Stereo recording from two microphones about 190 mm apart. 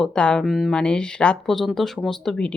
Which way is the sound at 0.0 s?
5° left (ahead or behind).